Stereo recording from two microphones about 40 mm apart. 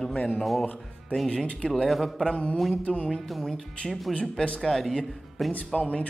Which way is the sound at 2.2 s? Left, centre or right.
Left.